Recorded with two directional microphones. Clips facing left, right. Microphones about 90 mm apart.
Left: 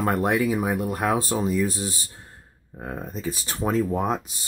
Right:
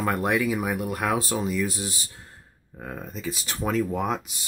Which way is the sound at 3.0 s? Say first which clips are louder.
Left 2 dB; 35° left (ahead or behind).